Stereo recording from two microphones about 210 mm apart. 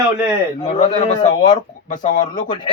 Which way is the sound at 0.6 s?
25° left (ahead or behind).